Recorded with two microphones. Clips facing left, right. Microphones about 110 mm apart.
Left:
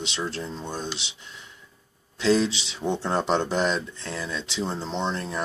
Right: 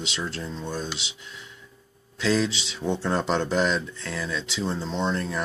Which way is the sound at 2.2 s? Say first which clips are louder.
Left 2 dB; 20° left (ahead or behind).